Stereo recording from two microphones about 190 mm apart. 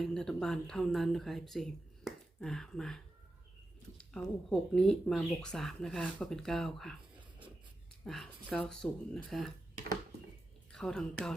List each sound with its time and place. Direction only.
0.0 s speech: centre (ahead or behind)
8.0 s speech: centre (ahead or behind)
10.7 s speech: 5° left (ahead or behind)